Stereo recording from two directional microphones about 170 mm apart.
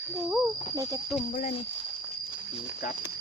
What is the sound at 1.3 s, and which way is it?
Speech, 40° left (ahead or behind).